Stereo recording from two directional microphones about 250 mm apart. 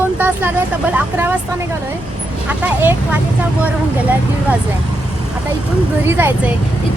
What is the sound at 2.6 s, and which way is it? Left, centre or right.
Speech, centre.